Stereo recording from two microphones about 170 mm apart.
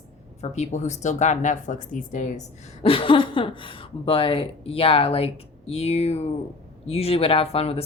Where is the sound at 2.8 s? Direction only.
30° left (ahead or behind).